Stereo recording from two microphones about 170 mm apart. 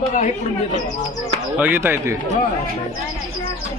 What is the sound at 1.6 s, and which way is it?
Speech, 10° right (ahead or behind).